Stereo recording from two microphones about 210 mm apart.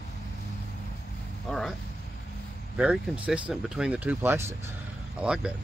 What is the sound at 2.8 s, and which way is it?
Speech, 5° right (ahead or behind).